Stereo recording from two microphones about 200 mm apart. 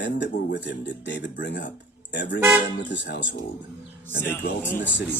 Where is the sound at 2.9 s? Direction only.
60° left (ahead or behind).